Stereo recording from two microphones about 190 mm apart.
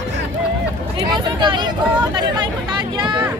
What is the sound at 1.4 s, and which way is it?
Speech, 25° right (ahead or behind).